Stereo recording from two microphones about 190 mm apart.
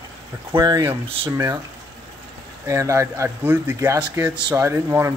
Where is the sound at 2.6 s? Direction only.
15° right (ahead or behind).